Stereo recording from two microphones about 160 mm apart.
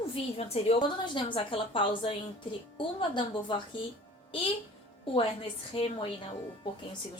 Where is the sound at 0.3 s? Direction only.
40° left (ahead or behind).